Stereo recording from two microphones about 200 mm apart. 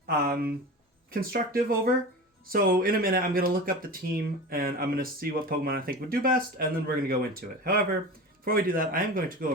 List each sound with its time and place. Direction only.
0.0 s speech: 50° right (ahead or behind)